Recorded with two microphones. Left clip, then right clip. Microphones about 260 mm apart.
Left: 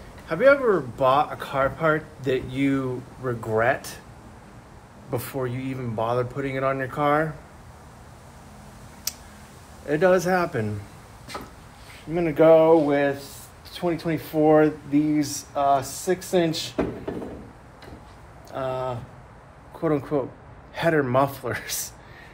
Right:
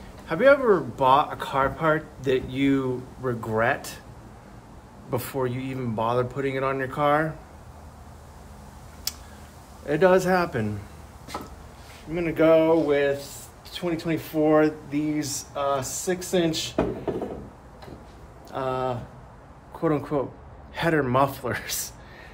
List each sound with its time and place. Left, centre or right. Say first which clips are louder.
0.3 s speech: even; centre
5.1 s speech: right 1 dB; centre
9.1 s tick: even; centre
9.8 s speech: even; centre
12.1 s speech: left 3 dB; centre
18.5 s a sound: right 1 dB; centre
19.8 s speech: left 1 dB; centre